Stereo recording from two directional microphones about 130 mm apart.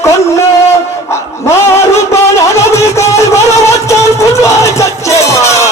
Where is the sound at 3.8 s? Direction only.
25° left (ahead or behind).